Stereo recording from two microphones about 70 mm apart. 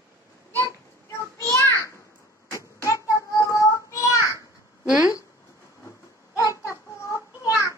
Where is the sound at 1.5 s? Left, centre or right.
Left.